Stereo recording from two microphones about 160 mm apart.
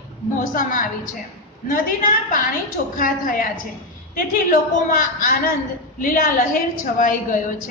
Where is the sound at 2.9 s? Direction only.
55° left (ahead or behind).